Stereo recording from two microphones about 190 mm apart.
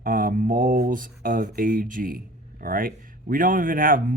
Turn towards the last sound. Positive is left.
turn(degrees=-45)  # may be behind; listen again after turning